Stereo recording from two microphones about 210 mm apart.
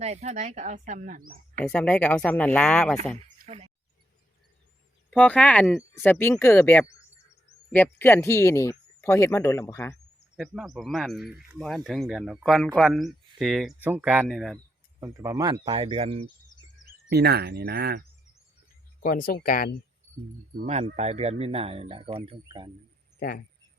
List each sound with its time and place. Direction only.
0.0 s speech: 35° right (ahead or behind)
1.6 s speech: 5° left (ahead or behind)
3.3 s a sound: 30° right (ahead or behind)
5.1 s speech: 5° left (ahead or behind)
10.3 s speech: centre (ahead or behind)
15.0 s speech: 15° right (ahead or behind)
16.8 s speech: 50° right (ahead or behind)
19.0 s speech: 40° left (ahead or behind)
20.6 s speech: 35° right (ahead or behind)